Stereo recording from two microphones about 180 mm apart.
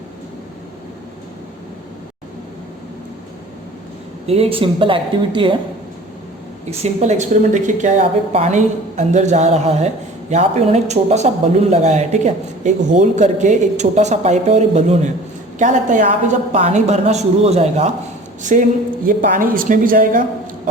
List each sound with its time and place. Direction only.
4.3 s a woman's voice: 30° right (ahead or behind)
6.7 s a woman's voice: 40° right (ahead or behind)